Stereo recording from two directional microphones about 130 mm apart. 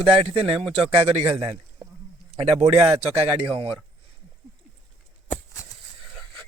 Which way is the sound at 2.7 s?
50° right (ahead or behind).